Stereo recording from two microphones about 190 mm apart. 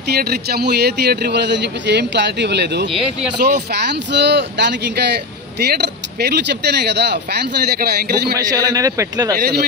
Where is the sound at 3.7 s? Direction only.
60° right (ahead or behind).